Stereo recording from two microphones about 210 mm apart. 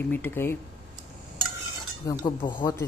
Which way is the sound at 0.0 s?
10° left (ahead or behind).